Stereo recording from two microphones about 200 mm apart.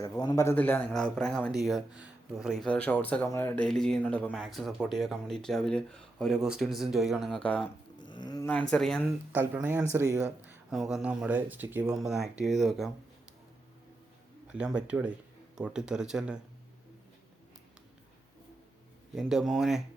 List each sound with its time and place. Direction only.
0.2 s a man's voice: 20° left (ahead or behind)
7.9 s livestock: 20° left (ahead or behind)
8.7 s a man's voice: 5° left (ahead or behind)
9.3 s a man's voice: 10° right (ahead or behind)
14.5 s a man's voice: 5° right (ahead or behind)
19.1 s a man's voice: centre (ahead or behind)